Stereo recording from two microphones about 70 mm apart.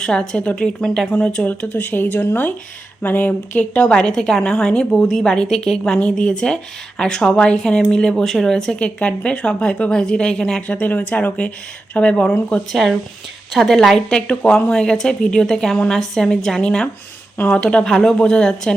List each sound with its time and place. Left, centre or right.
0.0 s speech: centre; by 3.7 s left
3.8 s speech: centre
9.0 s speech: centre
10.7 s speech: left